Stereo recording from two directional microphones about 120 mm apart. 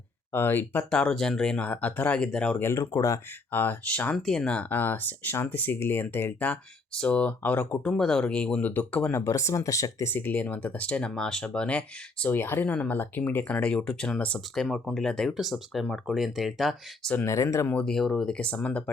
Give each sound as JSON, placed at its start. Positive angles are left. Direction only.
{"t": 0.3, "sound": "speech", "side_deg": 15}
{"t": 2.6, "sound": "speech", "side_deg": 25}
{"t": 9.1, "sound": "speech", "side_deg": 25}
{"t": 17.2, "sound": "speech", "side_deg": 25}
{"t": 17.7, "sound": "speech", "side_deg": 5}